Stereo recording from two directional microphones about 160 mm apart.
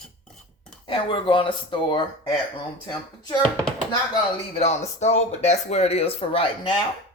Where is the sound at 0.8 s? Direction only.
30° left (ahead or behind).